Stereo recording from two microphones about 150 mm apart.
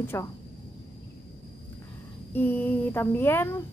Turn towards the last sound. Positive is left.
turn(degrees=15)  # may be behind; listen again after turning